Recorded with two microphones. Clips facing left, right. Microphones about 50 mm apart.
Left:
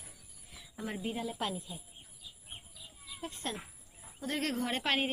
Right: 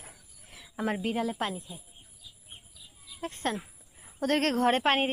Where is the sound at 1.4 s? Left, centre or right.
Right.